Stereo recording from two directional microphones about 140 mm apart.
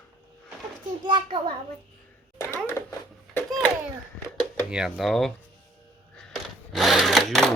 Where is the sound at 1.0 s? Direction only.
35° right (ahead or behind).